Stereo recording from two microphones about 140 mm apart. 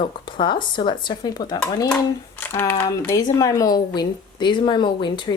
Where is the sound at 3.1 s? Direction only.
25° left (ahead or behind).